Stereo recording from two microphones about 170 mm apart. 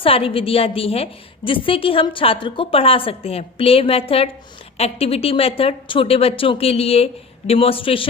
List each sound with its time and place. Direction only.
0.0 s a woman's voice: 35° left (ahead or behind)